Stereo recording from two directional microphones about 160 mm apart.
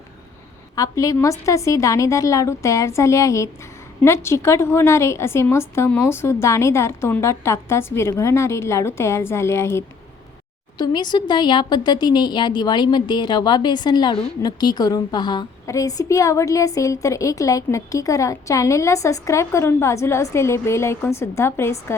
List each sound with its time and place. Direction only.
0.8 s a woman's voice: 20° left (ahead or behind)
10.8 s a woman's voice: 25° left (ahead or behind)